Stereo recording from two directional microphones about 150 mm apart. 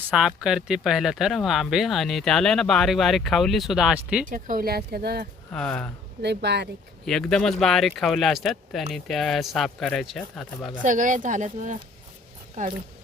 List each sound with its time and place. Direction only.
0.1 s speech: 5° right (ahead or behind)
4.3 s speech: 65° right (ahead or behind); by 5.3 s 85° right
5.5 s speech: 5° left (ahead or behind)
6.5 s speech: 90° right
7.0 s speech: 5° left (ahead or behind)
10.8 s speech: 60° right (ahead or behind)